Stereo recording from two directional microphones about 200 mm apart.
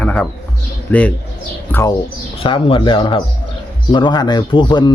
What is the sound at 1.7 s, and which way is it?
Speech, 15° left (ahead or behind).